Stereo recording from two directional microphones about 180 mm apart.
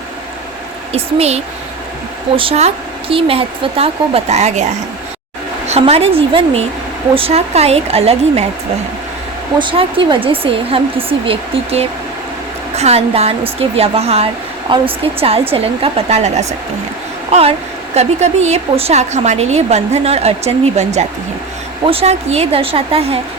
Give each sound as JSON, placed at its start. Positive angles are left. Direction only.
{"t": 0.9, "sound": "a woman's voice", "side_deg": -35}
{"t": 9.6, "sound": "a woman's voice", "side_deg": -25}